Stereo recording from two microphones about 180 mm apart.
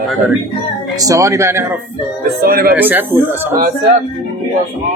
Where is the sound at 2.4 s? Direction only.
55° right (ahead or behind).